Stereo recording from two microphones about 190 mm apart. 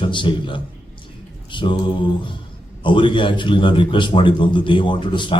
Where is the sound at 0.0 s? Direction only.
25° left (ahead or behind).